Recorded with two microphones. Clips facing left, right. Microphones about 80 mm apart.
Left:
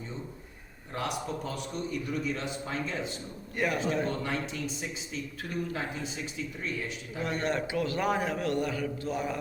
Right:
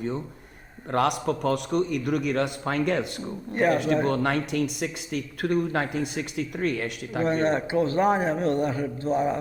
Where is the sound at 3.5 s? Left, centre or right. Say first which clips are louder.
Right 8 dB; right.